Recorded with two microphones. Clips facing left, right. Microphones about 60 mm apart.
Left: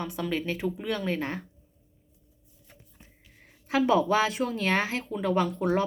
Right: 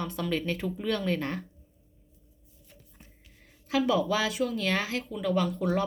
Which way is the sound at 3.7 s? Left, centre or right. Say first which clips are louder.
Left 3 dB; left.